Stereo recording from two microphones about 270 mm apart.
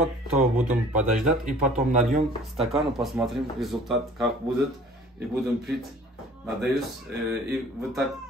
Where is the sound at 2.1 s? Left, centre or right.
Right.